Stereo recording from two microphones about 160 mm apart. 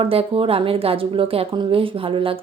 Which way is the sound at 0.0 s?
35° right (ahead or behind).